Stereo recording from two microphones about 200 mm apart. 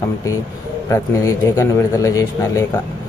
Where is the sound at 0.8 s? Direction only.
15° left (ahead or behind).